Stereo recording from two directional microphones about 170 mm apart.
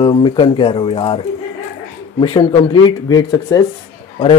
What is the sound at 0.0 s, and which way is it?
A man's voice, 30° left (ahead or behind).